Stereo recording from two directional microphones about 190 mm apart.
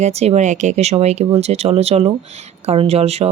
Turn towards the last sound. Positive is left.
turn(degrees=-35)  # may be behind; listen again after turning